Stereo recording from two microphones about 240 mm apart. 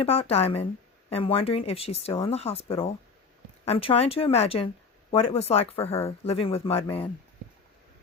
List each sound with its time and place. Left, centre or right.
0.0 s speech: left